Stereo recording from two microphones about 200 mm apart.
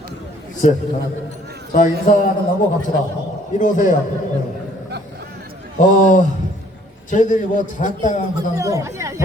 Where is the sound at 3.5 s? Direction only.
40° left (ahead or behind).